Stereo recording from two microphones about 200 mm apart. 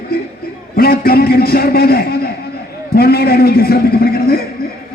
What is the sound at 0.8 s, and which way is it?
A man's voice, 50° left (ahead or behind).